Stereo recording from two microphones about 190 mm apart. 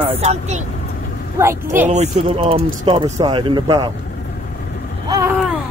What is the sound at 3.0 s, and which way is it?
Speech, 20° right (ahead or behind).